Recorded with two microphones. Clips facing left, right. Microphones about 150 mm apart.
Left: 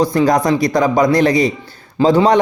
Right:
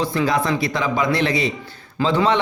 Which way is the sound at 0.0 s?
40° left (ahead or behind).